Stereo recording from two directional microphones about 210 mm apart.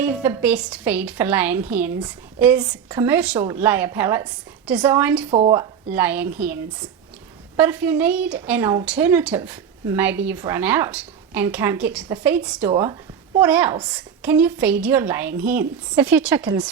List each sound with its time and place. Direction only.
0.0 s a woman's voice: 10° right (ahead or behind)
5.3 s speech: 25° right (ahead or behind)
5.5 s a woman's voice: 10° right (ahead or behind)
12.7 s a woman's voice: 20° right (ahead or behind)